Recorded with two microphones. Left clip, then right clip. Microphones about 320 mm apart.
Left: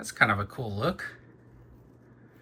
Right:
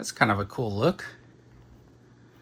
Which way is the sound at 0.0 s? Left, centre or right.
Centre.